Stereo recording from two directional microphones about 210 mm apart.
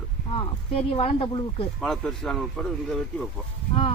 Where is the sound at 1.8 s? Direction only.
Centre (ahead or behind).